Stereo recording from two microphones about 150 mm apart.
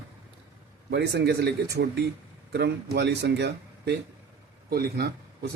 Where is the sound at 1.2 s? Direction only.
90° right.